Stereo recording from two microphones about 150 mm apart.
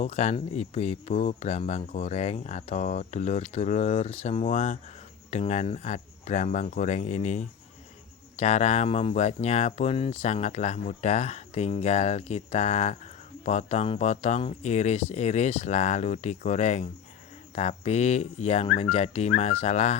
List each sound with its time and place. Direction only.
0.0 s speech: 50° left (ahead or behind)